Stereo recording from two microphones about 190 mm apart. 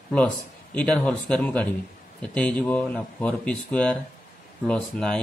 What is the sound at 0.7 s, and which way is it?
A man's voice, 5° left (ahead or behind).